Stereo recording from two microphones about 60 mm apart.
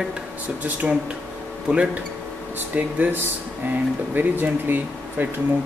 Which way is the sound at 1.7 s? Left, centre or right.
Centre.